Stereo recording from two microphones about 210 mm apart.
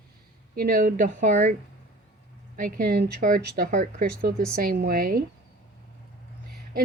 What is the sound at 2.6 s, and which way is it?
Speech, 40° right (ahead or behind).